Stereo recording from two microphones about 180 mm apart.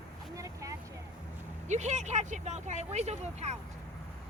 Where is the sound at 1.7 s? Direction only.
40° right (ahead or behind).